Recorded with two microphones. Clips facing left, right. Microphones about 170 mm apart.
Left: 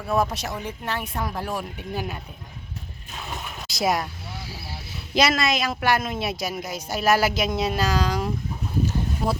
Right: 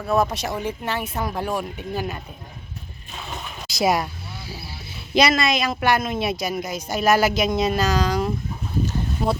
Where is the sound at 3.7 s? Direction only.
Centre (ahead or behind).